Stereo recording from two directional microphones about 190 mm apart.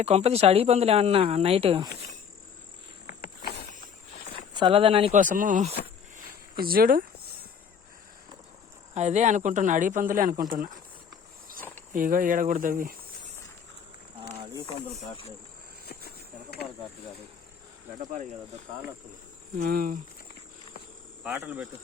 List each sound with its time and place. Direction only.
0.0 s speech: 35° right (ahead or behind)
3.1 s insect: 50° left (ahead or behind)
4.5 s speech: 25° right (ahead or behind)
5.1 s speech: 45° right (ahead or behind)
6.1 s a sound: 50° right (ahead or behind)
9.0 s speech: 35° right (ahead or behind)
11.9 s speech: 45° right (ahead or behind)
15.9 s insect: 55° left (ahead or behind)
19.5 s speech: 50° right (ahead or behind)
21.3 s speech: 10° right (ahead or behind)